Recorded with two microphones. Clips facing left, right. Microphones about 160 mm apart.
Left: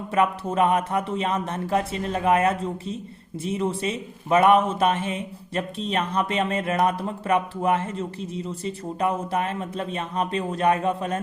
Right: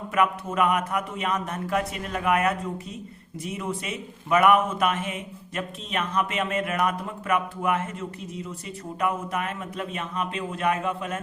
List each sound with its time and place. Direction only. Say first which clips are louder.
0.1 s a man's voice: left 2 dB; 30° left (ahead or behind)